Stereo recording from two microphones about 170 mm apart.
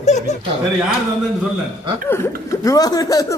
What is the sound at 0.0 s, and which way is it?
Chuckle, 45° left (ahead or behind).